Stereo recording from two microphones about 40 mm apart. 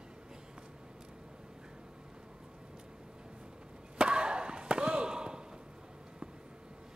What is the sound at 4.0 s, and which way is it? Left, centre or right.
Slam, right.